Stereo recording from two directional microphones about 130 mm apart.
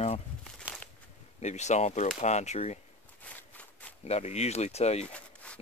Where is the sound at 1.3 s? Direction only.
60° left (ahead or behind).